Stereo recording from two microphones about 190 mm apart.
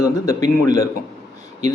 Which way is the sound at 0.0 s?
15° left (ahead or behind).